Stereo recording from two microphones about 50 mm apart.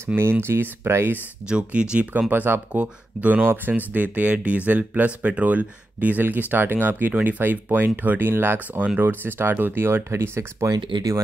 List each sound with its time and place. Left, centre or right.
0.2 s speech: right
1.5 s speech: right
2.1 s speech: right
8.7 s speech: right
9.0 s speech: right